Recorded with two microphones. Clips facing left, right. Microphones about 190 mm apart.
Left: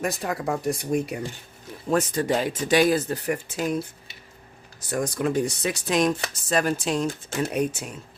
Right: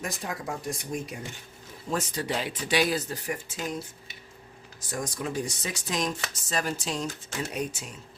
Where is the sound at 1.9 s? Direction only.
50° left (ahead or behind).